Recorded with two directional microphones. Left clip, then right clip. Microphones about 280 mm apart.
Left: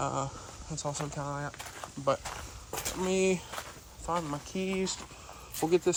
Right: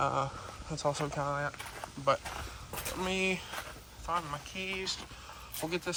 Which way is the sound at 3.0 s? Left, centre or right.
Centre.